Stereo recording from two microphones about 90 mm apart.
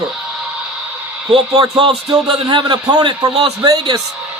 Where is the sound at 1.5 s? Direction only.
60° right (ahead or behind).